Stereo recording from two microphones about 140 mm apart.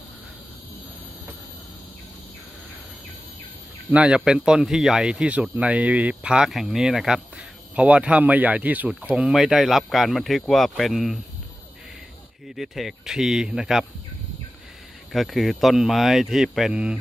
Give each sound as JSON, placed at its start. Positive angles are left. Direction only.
{"t": 3.9, "sound": "speech", "side_deg": -5}
{"t": 12.5, "sound": "speech", "side_deg": 0}
{"t": 15.1, "sound": "speech", "side_deg": 0}